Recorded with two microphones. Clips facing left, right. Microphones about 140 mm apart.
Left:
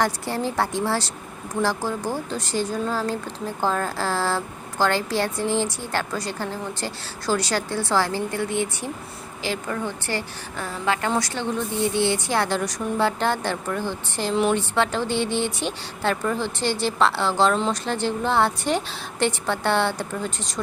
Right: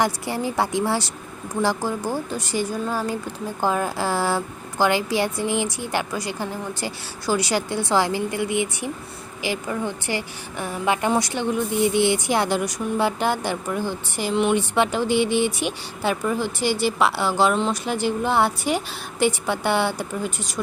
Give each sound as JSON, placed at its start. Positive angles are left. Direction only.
{"t": 0.0, "sound": "speech", "side_deg": -15}